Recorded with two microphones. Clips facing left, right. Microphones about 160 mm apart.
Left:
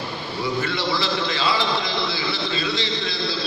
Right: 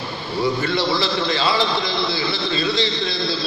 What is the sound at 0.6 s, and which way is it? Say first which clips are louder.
Speech: right 3 dB; 30° right (ahead or behind).